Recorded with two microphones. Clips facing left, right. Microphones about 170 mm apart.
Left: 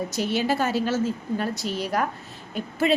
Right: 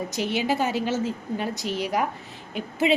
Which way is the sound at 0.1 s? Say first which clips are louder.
Even; 15° right (ahead or behind).